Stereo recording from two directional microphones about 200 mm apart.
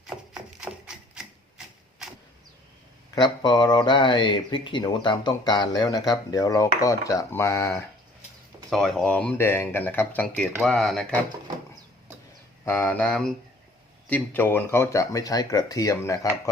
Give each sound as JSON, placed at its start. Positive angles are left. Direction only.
{"t": 0.6, "sound": "a sound", "side_deg": -5}
{"t": 3.2, "sound": "speech", "side_deg": 20}
{"t": 8.7, "sound": "speech", "side_deg": 0}
{"t": 12.6, "sound": "speech", "side_deg": 10}